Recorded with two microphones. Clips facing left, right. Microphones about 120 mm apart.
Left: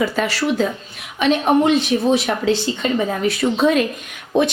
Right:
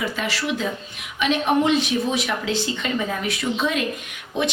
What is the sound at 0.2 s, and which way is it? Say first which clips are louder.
Speech: left 6 dB; 40° left (ahead or behind).